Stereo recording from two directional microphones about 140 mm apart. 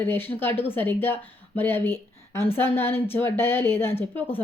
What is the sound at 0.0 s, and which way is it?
A woman's voice, 15° left (ahead or behind).